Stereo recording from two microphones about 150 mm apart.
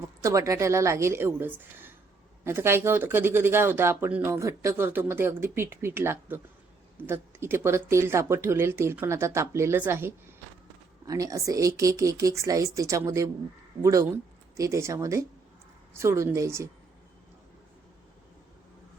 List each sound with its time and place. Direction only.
0.2 s speech: 20° right (ahead or behind)